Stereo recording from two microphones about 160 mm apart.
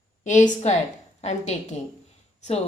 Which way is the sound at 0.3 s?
50° left (ahead or behind).